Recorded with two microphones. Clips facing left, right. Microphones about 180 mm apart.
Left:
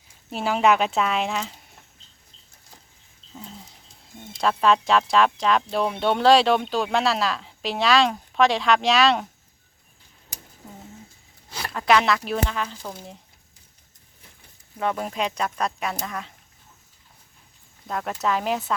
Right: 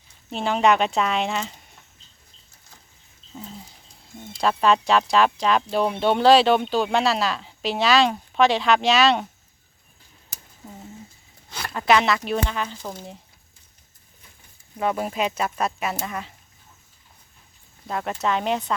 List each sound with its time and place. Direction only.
0.3 s speech: 5° left (ahead or behind)
3.3 s dog: centre (ahead or behind)
4.2 s speech: centre (ahead or behind)
11.4 s a sound: 5° left (ahead or behind)
11.8 s speech: centre (ahead or behind)
14.8 s speech: 5° right (ahead or behind)
17.8 s speech: centre (ahead or behind)